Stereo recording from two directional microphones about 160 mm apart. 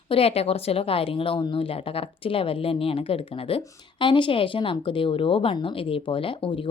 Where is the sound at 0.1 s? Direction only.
40° left (ahead or behind).